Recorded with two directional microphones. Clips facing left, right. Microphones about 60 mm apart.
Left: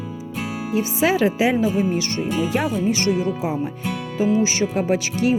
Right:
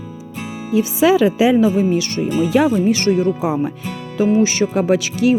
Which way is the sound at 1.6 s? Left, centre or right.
Right.